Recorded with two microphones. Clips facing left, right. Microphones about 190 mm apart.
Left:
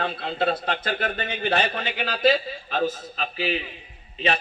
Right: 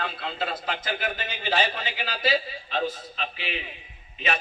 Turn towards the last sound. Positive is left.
turn(degrees=35)  # may be behind; listen again after turning